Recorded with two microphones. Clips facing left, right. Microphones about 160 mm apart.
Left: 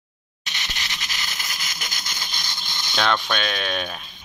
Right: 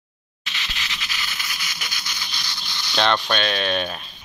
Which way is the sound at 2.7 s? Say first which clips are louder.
Even; 20° left (ahead or behind).